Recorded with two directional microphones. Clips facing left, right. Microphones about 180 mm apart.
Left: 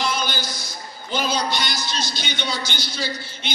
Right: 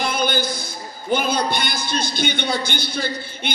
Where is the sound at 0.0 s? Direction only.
55° right (ahead or behind).